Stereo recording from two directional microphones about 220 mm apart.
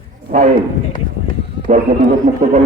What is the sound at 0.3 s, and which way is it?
Speech, 35° right (ahead or behind).